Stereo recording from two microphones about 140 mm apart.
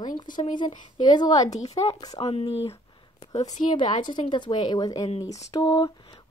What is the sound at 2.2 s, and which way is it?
Speech, 45° left (ahead or behind).